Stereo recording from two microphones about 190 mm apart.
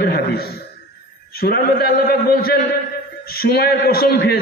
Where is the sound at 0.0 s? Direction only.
55° left (ahead or behind).